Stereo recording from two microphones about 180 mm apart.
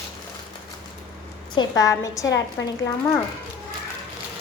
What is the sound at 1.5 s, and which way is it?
Speech, 20° left (ahead or behind).